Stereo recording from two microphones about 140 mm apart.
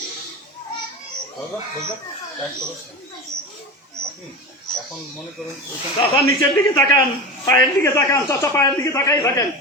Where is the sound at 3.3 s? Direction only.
5° left (ahead or behind).